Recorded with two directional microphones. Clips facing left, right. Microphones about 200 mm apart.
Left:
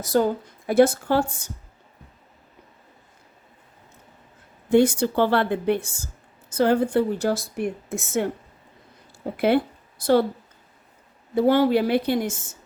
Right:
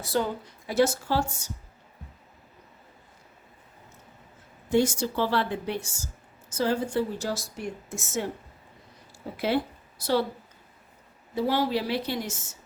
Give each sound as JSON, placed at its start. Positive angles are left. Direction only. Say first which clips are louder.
{"t": 0.0, "sound": "a woman's voice", "louder": "left 7 dB", "side_deg": 45}
{"t": 4.7, "sound": "a woman's voice", "louder": "left 6 dB", "side_deg": 60}
{"t": 10.0, "sound": "a woman's voice", "louder": "left 7 dB", "side_deg": 50}
{"t": 11.3, "sound": "a woman's voice", "louder": "left 8 dB", "side_deg": 55}